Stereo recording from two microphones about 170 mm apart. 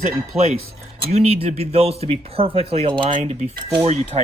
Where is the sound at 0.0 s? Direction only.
40° right (ahead or behind).